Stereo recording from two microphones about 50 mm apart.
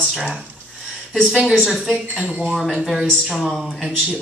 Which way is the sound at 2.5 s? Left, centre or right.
Centre.